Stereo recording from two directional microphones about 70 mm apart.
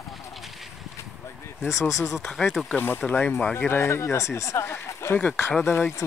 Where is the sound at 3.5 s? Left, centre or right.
Left.